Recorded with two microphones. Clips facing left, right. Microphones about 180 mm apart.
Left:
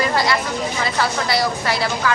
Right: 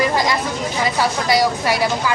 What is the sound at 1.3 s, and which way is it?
Speech, 15° right (ahead or behind).